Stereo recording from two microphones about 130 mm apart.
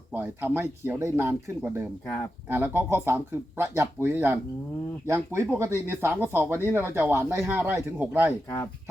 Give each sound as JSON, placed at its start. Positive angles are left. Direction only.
{"t": 0.1, "sound": "speech", "side_deg": -15}